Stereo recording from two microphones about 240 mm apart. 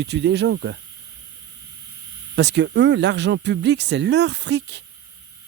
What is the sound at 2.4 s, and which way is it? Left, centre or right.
Speech, right.